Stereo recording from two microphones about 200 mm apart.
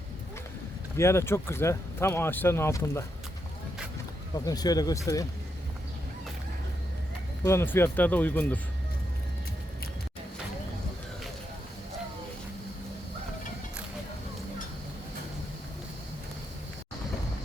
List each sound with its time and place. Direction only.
0.9 s speech: 15° left (ahead or behind)
4.4 s speech: 20° left (ahead or behind)
7.4 s speech: 10° left (ahead or behind)